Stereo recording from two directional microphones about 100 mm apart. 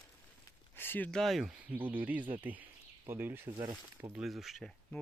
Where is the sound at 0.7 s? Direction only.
20° left (ahead or behind).